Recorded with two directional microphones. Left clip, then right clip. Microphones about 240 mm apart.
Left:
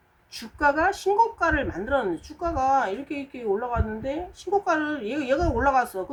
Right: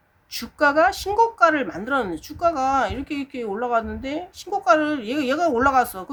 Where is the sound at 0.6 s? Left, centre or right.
Right.